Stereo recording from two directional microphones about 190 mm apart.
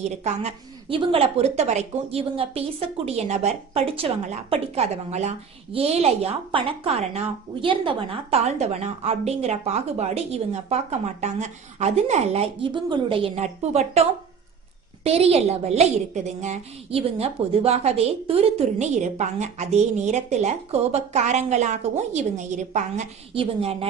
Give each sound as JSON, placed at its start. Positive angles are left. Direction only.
{"t": 0.0, "sound": "a woman's voice", "side_deg": -35}
{"t": 15.0, "sound": "a woman's voice", "side_deg": -30}